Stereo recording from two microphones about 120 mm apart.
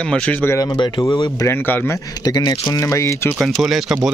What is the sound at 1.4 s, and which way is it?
Speech, 15° left (ahead or behind).